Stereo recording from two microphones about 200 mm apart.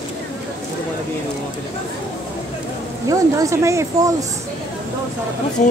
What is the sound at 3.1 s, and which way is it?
Speech, 15° right (ahead or behind).